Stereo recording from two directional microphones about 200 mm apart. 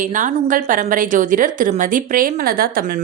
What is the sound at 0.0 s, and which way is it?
A woman's voice, 40° right (ahead or behind).